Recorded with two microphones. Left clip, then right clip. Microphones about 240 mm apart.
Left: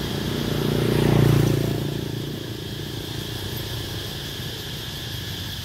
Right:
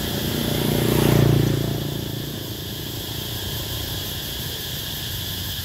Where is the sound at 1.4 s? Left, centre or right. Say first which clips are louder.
Even; left.